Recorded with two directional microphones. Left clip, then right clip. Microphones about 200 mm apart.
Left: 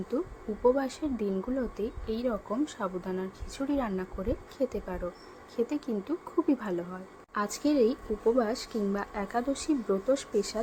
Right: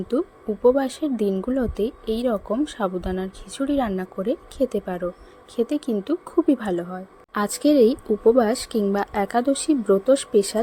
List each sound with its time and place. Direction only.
0.6 s a woman's voice: 30° right (ahead or behind)